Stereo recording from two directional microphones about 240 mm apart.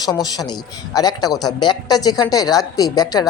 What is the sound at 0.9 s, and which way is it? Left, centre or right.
Speech, centre.